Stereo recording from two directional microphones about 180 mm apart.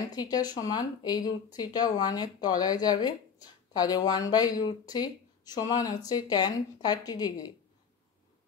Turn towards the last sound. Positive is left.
turn(degrees=20)  # may be behind; listen again after turning